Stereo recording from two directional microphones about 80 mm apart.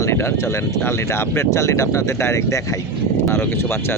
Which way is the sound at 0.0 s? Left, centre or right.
Left.